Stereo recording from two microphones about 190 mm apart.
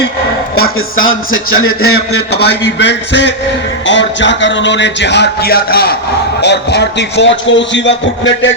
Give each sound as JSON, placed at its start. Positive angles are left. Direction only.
{"t": 0.6, "sound": "a man's voice", "side_deg": 90}